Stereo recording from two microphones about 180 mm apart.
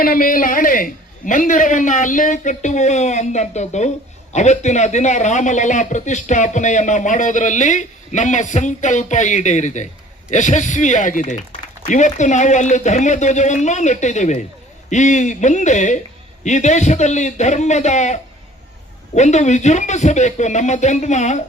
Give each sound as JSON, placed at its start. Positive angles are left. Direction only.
{"t": 0.0, "sound": "a man's voice", "side_deg": 50}